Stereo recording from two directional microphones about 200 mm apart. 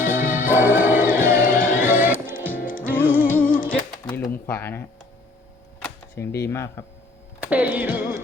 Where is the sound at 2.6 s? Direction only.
45° left (ahead or behind).